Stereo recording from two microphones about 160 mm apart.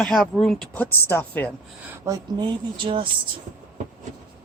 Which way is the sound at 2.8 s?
30° right (ahead or behind).